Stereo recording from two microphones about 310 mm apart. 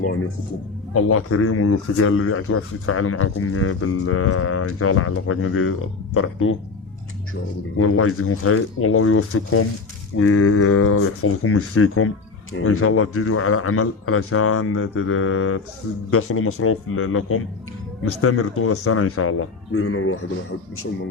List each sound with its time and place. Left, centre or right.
0.9 s speech: left
7.8 s speech: left